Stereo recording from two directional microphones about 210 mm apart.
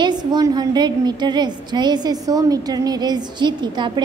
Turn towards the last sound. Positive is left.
turn(degrees=-20)  # may be behind; listen again after turning